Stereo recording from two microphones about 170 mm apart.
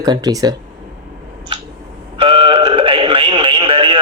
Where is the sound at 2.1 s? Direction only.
30° right (ahead or behind).